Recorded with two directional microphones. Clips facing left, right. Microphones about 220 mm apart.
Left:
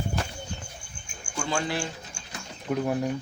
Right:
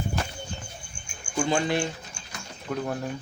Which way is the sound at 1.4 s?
20° right (ahead or behind).